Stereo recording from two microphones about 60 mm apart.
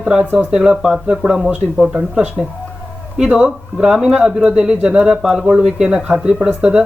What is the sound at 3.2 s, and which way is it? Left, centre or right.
Speech, centre.